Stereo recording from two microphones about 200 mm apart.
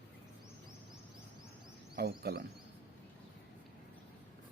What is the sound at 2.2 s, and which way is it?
Speech, 50° right (ahead or behind).